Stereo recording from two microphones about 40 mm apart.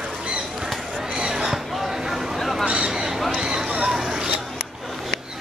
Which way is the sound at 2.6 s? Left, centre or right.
Right.